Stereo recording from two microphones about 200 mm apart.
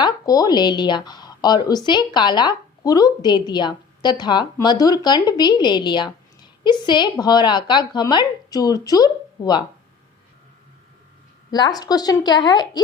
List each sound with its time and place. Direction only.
0.0 s a woman's voice: 20° left (ahead or behind)
11.5 s a woman's voice: 20° left (ahead or behind)